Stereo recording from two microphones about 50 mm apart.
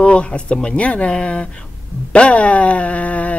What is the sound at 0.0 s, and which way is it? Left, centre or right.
Speech, left.